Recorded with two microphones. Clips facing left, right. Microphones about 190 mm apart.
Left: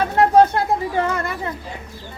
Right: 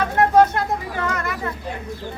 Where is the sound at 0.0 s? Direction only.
30° left (ahead or behind).